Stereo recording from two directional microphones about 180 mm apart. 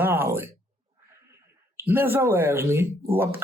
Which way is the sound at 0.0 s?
10° right (ahead or behind).